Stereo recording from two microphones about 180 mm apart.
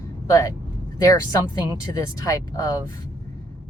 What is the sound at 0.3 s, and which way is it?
Speech, 20° left (ahead or behind).